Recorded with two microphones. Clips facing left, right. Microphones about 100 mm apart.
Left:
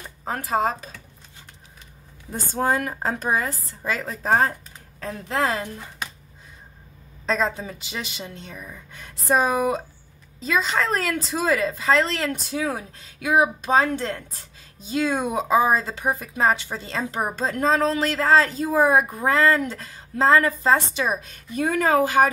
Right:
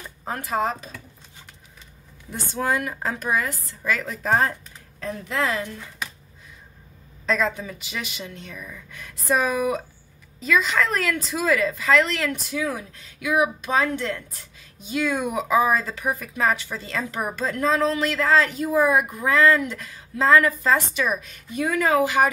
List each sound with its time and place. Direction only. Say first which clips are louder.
0.2 s speech: left 2 dB; 35° left (ahead or behind)
2.3 s a woman's voice: left 2 dB; 40° left (ahead or behind)
7.2 s a woman's voice: even; 30° left (ahead or behind)